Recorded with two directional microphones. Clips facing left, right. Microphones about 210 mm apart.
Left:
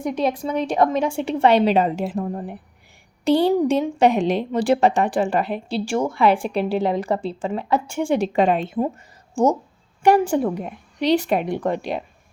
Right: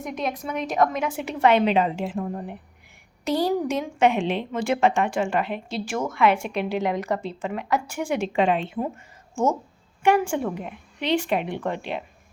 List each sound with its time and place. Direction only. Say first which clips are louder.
0.0 s a woman's voice: left 7 dB; 30° left (ahead or behind)